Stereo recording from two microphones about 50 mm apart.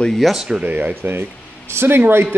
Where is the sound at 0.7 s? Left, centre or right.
Right.